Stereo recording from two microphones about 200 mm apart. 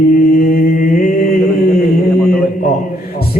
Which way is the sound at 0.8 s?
40° left (ahead or behind).